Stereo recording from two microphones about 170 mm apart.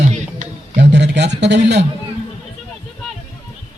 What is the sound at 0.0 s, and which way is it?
Music, 45° right (ahead or behind).